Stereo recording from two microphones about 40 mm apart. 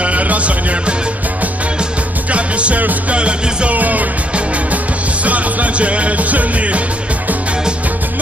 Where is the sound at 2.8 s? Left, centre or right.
Right.